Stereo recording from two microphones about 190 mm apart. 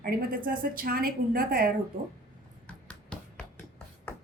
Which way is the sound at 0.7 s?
50° right (ahead or behind).